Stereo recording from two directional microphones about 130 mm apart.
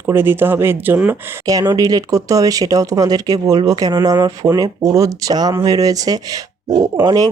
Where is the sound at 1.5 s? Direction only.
30° right (ahead or behind).